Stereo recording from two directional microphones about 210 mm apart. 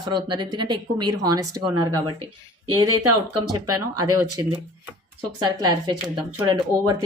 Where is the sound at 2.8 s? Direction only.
90° right.